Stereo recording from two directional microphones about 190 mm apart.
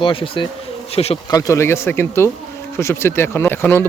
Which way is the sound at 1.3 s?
15° left (ahead or behind).